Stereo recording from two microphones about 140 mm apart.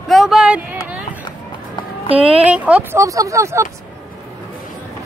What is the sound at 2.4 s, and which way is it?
Speech, 10° right (ahead or behind).